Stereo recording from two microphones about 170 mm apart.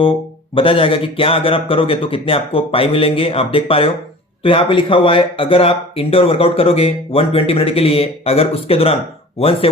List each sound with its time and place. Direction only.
0.5 s speech: 30° left (ahead or behind)